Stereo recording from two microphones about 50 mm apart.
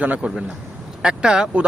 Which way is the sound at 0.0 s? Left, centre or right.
Right.